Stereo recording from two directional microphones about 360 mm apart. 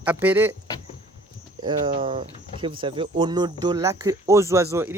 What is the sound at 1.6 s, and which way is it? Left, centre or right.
Speech, centre.